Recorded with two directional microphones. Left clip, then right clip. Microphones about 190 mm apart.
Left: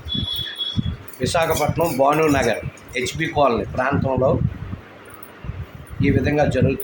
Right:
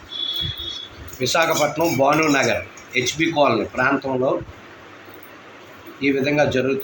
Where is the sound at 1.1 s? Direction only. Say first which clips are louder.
Right 1 dB; 25° left (ahead or behind).